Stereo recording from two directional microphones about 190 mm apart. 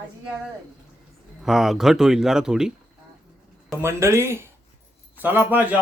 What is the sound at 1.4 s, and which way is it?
Speech, centre (ahead or behind).